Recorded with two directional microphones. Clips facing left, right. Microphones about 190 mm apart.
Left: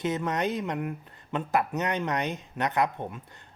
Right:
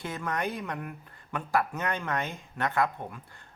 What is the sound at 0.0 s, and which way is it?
Speech, 20° left (ahead or behind).